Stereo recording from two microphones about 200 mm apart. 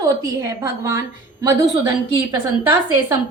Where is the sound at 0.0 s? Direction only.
15° right (ahead or behind).